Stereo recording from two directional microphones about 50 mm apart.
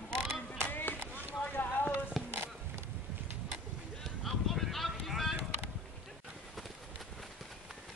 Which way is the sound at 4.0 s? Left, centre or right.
Centre.